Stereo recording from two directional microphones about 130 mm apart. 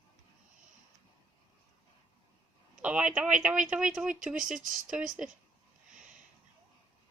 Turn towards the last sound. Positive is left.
turn(degrees=-5)  # may be behind; listen again after turning